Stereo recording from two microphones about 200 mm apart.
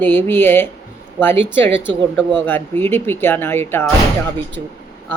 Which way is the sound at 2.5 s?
10° left (ahead or behind).